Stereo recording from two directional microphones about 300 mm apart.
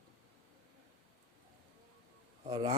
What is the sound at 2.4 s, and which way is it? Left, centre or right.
Speech, centre.